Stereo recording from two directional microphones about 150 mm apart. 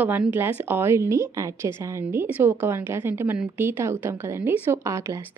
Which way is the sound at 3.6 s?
15° right (ahead or behind).